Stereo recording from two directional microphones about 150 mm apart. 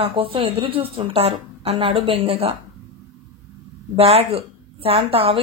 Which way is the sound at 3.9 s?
40° right (ahead or behind).